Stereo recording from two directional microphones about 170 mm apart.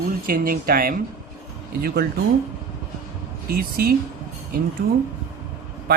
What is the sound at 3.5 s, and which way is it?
Speech, 60° right (ahead or behind).